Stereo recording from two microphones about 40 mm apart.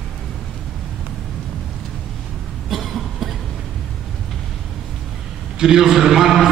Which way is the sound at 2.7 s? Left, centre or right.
Centre.